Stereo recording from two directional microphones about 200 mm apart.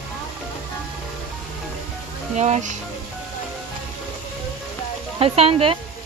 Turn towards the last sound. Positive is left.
turn(degrees=-25)  # may be behind; listen again after turning